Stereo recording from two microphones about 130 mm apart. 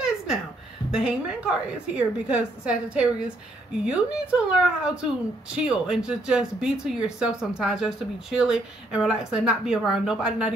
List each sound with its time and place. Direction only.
0.9 s a woman's voice: 5° right (ahead or behind)